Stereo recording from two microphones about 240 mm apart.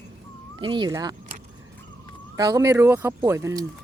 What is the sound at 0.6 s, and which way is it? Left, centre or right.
Speech, centre.